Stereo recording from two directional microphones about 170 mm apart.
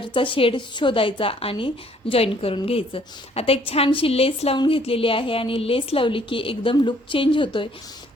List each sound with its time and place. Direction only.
0.0 s a woman's voice: 30° left (ahead or behind)